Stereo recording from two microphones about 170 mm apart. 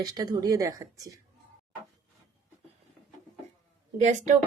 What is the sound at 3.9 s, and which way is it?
Speech, 40° right (ahead or behind).